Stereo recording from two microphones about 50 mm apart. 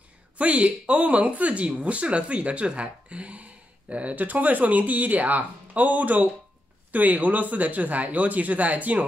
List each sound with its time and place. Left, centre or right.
0.4 s speech: right